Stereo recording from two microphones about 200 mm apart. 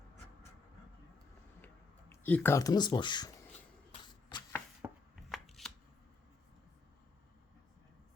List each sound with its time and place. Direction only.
1.6 s a sound: 10° left (ahead or behind)
4.1 s shuffling cards: 20° left (ahead or behind)
4.8 s chopping: 15° right (ahead or behind)
5.3 s chopping: centre (ahead or behind)